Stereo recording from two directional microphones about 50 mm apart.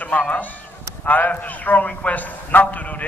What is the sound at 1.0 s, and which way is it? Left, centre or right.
A man's voice, left.